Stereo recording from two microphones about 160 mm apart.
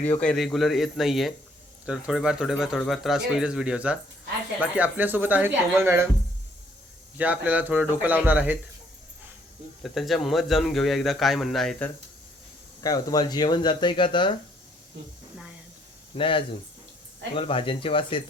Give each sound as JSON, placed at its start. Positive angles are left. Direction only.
{"t": 0.0, "sound": "speech", "side_deg": 10}
{"t": 7.2, "sound": "speech", "side_deg": -10}
{"t": 9.8, "sound": "speech", "side_deg": 0}
{"t": 12.8, "sound": "speech", "side_deg": 20}
{"t": 16.1, "sound": "speech", "side_deg": 30}